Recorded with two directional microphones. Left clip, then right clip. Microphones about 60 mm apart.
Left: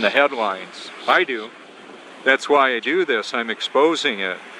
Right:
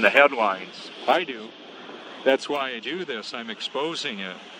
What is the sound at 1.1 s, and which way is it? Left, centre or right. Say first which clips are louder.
Speech: left 5 dB; left.